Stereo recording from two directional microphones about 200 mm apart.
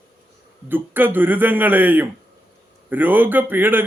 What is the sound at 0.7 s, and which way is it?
Speech, 10° right (ahead or behind).